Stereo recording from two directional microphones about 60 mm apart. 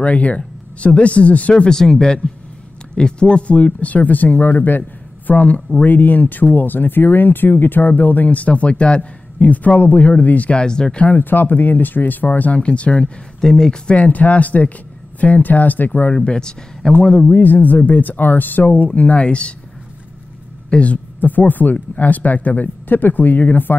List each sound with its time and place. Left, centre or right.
0.0 s speech: left
1.6 s speech: centre
11.1 s speech: left; by 13.9 s centre
13.9 s speech: left
16.2 s speech: centre
17.3 s speech: left
20.7 s speech: left